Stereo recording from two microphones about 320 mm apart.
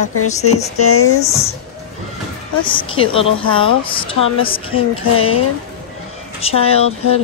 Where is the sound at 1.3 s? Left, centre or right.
Centre.